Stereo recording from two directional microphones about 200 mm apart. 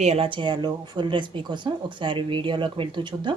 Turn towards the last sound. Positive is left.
turn(degrees=-25)  # may be behind; listen again after turning